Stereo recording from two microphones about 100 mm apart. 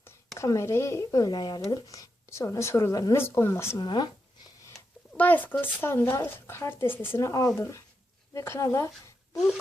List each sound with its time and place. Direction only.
0.3 s speech: 30° left (ahead or behind)
3.8 s speech: 50° left (ahead or behind)
5.1 s speech: 15° left (ahead or behind)